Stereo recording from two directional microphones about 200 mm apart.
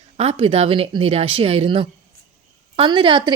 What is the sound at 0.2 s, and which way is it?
Speech, 30° right (ahead or behind).